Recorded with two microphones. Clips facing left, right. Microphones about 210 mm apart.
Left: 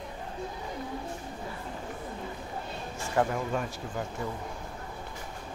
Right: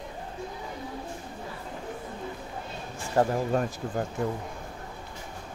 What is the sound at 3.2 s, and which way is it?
Speech, 35° right (ahead or behind).